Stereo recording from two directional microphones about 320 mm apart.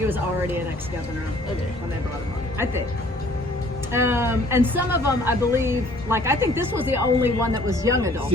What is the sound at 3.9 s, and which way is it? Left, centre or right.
A woman's voice, centre.